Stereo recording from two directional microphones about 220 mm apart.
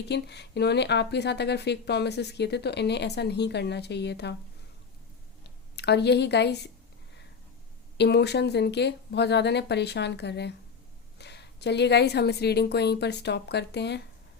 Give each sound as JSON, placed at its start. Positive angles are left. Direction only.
{"t": 0.0, "sound": "speech", "side_deg": 50}
{"t": 5.4, "sound": "a sound", "side_deg": 50}
{"t": 7.9, "sound": "speech", "side_deg": 50}